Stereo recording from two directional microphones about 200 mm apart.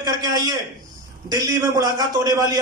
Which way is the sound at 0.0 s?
20° right (ahead or behind).